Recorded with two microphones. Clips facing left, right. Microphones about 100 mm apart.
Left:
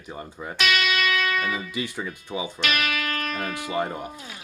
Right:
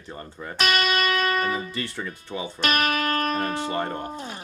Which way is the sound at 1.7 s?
10° left (ahead or behind).